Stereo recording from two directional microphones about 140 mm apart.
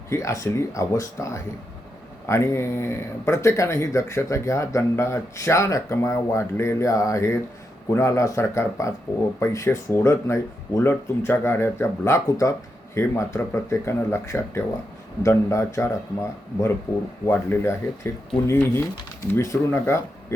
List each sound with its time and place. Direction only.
0.1 s speech: 20° left (ahead or behind)